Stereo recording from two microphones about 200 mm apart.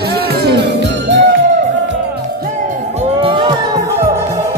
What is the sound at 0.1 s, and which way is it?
Music, 55° right (ahead or behind).